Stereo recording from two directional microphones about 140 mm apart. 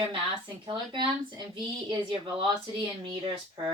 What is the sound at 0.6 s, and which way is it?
Speech, 35° right (ahead or behind).